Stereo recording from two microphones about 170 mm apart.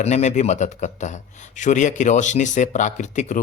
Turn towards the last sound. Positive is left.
turn(degrees=45)  # may be behind; listen again after turning